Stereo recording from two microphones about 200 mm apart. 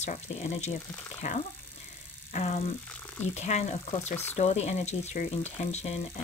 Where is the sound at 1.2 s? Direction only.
40° left (ahead or behind).